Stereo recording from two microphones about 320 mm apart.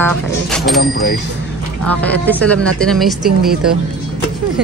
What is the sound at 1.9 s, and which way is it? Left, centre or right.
Speech, centre.